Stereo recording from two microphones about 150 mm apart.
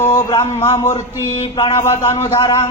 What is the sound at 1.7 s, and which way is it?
Music, 20° left (ahead or behind).